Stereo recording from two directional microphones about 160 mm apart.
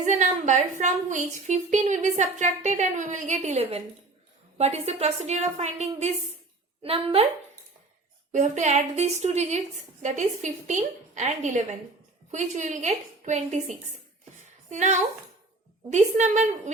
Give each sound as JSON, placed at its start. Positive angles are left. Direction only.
{"t": 0.0, "sound": "a woman's voice", "side_deg": -50}
{"t": 8.3, "sound": "a woman's voice", "side_deg": -50}